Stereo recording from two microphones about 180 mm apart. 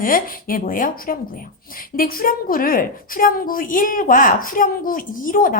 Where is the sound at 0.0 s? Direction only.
50° left (ahead or behind).